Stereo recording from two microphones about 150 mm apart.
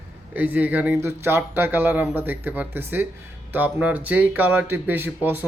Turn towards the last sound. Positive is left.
turn(degrees=-15)  # may be behind; listen again after turning